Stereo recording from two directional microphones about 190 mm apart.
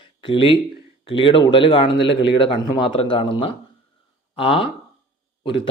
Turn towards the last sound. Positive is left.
turn(degrees=25)  # may be behind; listen again after turning